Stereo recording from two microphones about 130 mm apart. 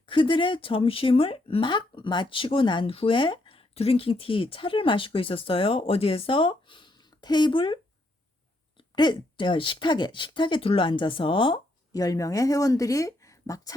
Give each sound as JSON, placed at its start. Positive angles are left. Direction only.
{"t": 0.1, "sound": "speech", "side_deg": 40}
{"t": 9.0, "sound": "speech", "side_deg": 35}
{"t": 11.9, "sound": "speech", "side_deg": 25}